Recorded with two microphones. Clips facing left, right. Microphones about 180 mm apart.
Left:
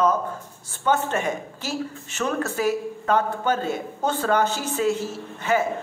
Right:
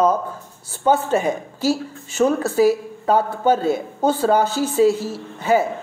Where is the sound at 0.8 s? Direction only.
35° right (ahead or behind).